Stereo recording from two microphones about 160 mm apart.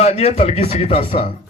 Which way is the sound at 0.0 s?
40° left (ahead or behind).